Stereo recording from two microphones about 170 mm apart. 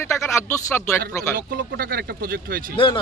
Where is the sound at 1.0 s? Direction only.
65° right (ahead or behind).